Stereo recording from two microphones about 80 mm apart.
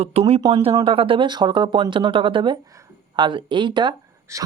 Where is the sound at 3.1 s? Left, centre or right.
Right.